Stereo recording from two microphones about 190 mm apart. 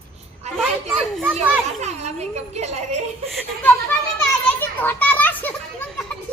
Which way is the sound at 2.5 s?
35° right (ahead or behind).